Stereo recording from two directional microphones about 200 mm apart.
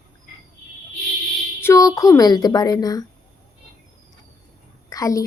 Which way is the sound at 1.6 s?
15° left (ahead or behind).